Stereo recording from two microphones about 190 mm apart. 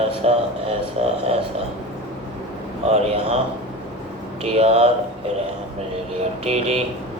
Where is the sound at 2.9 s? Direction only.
35° right (ahead or behind).